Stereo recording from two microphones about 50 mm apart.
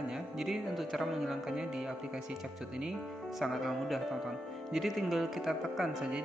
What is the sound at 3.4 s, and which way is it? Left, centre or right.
A man's voice, centre.